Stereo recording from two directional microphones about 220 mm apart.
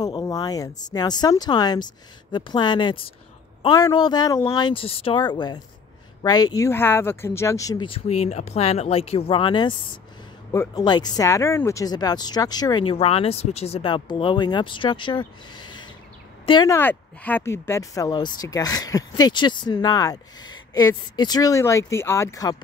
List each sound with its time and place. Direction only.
0.0 s speech: 15° left (ahead or behind)
8.2 s speech: 30° left (ahead or behind)